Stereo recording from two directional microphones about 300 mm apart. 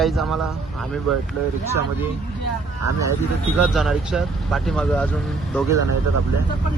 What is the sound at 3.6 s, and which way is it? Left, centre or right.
Speech, centre.